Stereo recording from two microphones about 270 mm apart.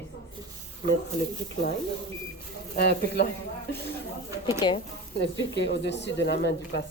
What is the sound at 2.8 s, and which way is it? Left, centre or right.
Speech, left.